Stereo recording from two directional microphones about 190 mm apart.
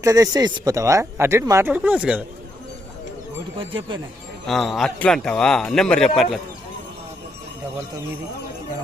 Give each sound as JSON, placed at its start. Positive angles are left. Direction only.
{"t": 0.0, "sound": "speech", "side_deg": -20}
{"t": 3.6, "sound": "speech", "side_deg": -25}
{"t": 4.4, "sound": "a man's voice", "side_deg": 0}